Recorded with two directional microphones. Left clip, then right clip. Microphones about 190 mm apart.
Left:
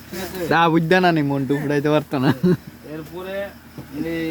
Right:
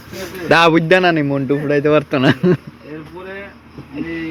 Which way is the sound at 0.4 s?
Centre (ahead or behind).